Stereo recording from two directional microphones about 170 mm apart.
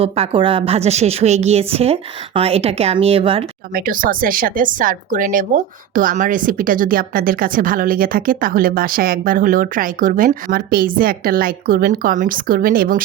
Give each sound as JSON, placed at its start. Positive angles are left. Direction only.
{"t": 0.0, "sound": "a woman's voice", "side_deg": -35}
{"t": 3.8, "sound": "a woman's voice", "side_deg": -55}